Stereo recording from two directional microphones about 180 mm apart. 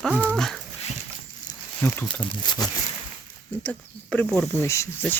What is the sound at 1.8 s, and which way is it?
Speech, 10° left (ahead or behind).